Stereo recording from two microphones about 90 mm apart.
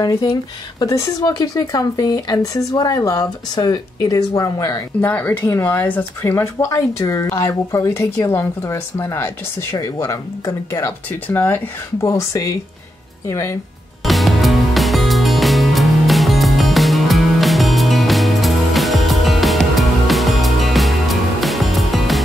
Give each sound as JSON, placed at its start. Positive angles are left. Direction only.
{"t": 0.0, "sound": "speech", "side_deg": 40}
{"t": 5.0, "sound": "a woman's voice", "side_deg": 20}
{"t": 14.0, "sound": "music", "side_deg": 0}